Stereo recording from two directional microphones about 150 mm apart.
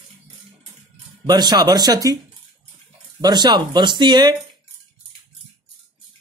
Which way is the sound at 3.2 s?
25° right (ahead or behind).